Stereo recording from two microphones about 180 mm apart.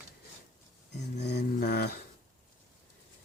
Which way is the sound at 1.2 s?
65° left (ahead or behind).